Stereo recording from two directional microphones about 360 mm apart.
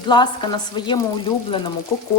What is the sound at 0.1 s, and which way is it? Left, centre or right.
Speech, centre.